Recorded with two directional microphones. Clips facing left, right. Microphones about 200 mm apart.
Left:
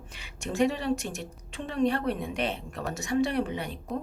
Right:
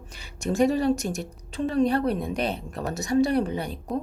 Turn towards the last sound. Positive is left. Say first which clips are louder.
# right 5 dB
turn(degrees=-40)  # may be behind; listen again after turning